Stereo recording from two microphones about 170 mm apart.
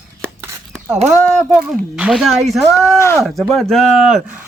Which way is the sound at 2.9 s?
15° left (ahead or behind).